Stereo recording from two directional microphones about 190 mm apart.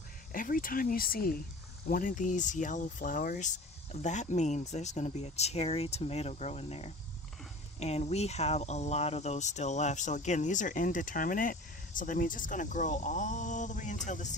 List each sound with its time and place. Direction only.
0.3 s speech: 45° left (ahead or behind)